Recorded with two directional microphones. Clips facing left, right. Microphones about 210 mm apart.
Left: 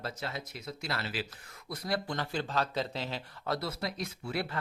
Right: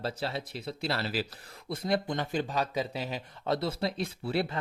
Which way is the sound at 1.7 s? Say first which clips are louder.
Right 4 dB; 25° right (ahead or behind).